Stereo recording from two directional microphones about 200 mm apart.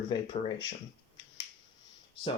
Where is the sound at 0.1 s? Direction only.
20° left (ahead or behind).